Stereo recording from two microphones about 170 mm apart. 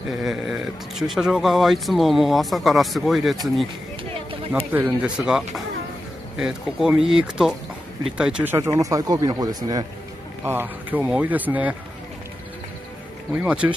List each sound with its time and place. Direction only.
0.1 s speech: centre (ahead or behind)
4.7 s speech: 10° right (ahead or behind)
10.4 s speech: 10° right (ahead or behind)
13.3 s speech: 10° right (ahead or behind)